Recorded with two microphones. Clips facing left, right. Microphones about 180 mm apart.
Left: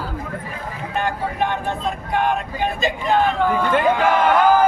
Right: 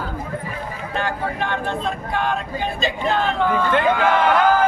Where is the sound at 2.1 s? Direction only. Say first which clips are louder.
Left 4 dB; 15° left (ahead or behind).